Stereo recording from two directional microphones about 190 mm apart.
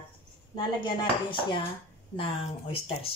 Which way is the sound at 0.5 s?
25° left (ahead or behind).